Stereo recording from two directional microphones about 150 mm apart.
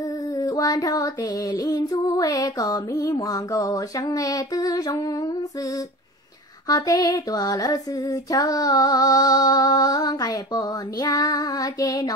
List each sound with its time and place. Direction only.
0.4 s female singing: 25° left (ahead or behind)
6.7 s female singing: 25° left (ahead or behind)